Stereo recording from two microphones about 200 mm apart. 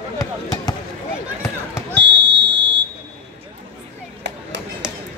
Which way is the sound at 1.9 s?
60° right (ahead or behind).